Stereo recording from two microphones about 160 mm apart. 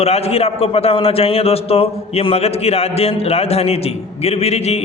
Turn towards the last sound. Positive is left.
turn(degrees=40)  # may be behind; listen again after turning